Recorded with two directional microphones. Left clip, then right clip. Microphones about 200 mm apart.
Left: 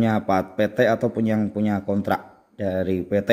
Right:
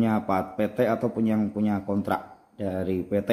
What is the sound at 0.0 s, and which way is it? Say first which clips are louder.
Speech: left 4 dB; 40° left (ahead or behind).